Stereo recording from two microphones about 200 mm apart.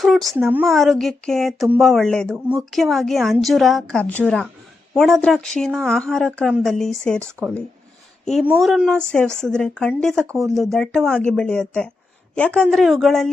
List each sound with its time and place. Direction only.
0.0 s speech: centre (ahead or behind)